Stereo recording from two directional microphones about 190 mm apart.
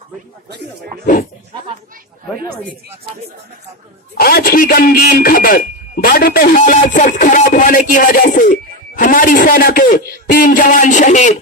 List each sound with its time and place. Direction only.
4.2 s a man's voice: 55° left (ahead or behind)